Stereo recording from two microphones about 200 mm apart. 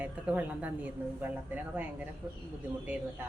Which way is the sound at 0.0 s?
5° right (ahead or behind).